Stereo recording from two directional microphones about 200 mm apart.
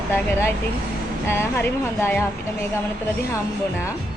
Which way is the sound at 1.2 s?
10° left (ahead or behind).